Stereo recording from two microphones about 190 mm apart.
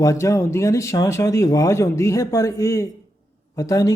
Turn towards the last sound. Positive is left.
turn(degrees=20)  # may be behind; listen again after turning